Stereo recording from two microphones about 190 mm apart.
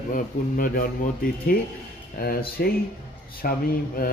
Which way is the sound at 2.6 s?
55° left (ahead or behind).